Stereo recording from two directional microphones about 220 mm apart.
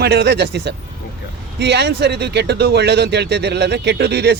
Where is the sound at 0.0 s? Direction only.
50° right (ahead or behind).